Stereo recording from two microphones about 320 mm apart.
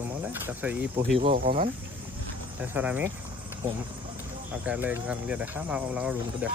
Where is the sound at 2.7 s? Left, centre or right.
Centre.